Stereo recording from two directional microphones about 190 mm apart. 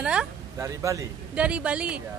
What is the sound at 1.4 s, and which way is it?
Speech, 5° right (ahead or behind).